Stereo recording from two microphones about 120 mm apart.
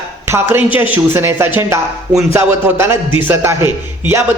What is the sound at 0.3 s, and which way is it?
A man's voice, 20° right (ahead or behind).